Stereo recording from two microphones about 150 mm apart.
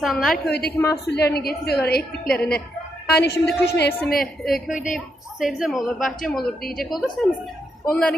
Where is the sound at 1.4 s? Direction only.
90° left.